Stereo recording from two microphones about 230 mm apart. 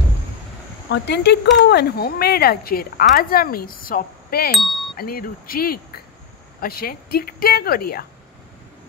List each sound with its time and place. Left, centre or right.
0.8 s speech: left